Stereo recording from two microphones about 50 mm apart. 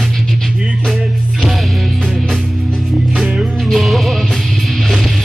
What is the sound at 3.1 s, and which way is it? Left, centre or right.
Music, centre.